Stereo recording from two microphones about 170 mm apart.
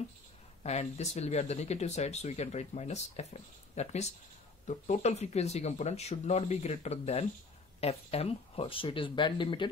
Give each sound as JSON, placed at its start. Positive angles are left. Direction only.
{"t": 0.7, "sound": "speech", "side_deg": 40}